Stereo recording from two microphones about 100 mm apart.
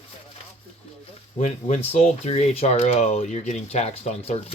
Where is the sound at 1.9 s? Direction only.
90° left.